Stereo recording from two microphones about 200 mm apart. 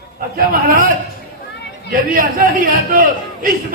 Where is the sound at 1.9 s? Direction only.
45° right (ahead or behind).